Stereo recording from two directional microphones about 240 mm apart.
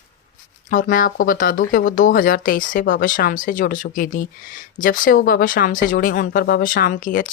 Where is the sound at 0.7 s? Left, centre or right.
Left.